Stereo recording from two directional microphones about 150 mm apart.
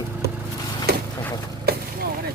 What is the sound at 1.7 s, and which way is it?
Vehicle, 90° right.